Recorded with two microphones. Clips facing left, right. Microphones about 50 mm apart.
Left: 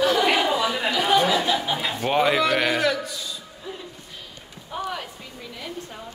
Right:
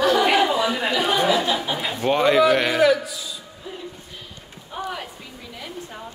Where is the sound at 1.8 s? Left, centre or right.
Centre.